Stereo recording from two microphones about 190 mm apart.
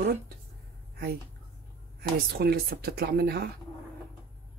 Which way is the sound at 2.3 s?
55° right (ahead or behind).